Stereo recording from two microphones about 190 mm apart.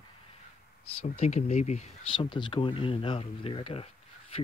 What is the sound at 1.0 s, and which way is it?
Speech, 35° left (ahead or behind).